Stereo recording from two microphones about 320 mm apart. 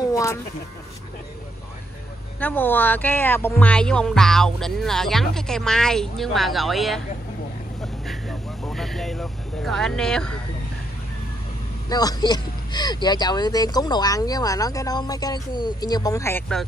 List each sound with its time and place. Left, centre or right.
0.0 s a sound: centre
2.4 s speech: centre
7.8 s vehicle: centre
11.9 s speech: centre